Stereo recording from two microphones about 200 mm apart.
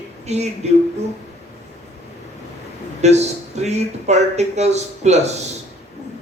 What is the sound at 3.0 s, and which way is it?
Speech, 35° right (ahead or behind).